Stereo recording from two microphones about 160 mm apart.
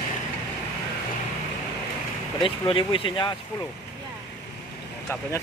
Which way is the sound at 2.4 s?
35° left (ahead or behind).